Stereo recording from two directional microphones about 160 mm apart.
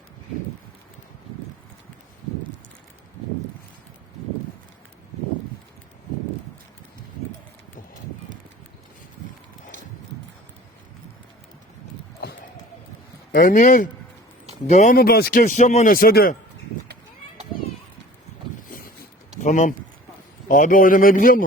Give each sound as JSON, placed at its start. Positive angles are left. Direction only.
{"t": 13.3, "sound": "speech", "side_deg": 55}
{"t": 14.9, "sound": "speech", "side_deg": 70}
{"t": 19.4, "sound": "speech", "side_deg": 50}